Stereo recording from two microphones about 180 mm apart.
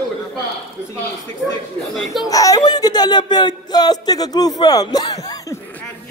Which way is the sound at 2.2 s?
20° left (ahead or behind).